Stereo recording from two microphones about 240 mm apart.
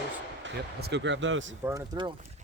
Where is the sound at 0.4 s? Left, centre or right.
Right.